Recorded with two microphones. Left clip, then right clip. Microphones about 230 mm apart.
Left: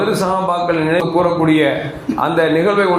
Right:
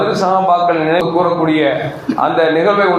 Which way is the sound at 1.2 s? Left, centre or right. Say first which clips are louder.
Right 1 dB; left.